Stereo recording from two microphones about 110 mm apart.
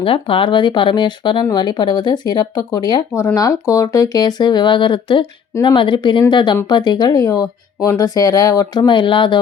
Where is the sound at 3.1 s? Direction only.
30° left (ahead or behind).